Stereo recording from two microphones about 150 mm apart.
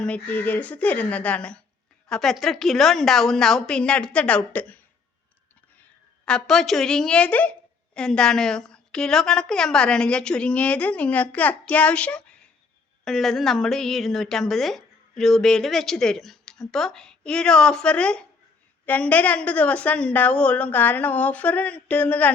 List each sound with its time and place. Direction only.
0.0 s a woman's voice: 10° left (ahead or behind)
6.2 s a woman's voice: 5° left (ahead or behind)